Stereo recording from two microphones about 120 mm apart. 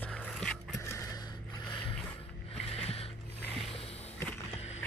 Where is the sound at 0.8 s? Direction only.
25° left (ahead or behind).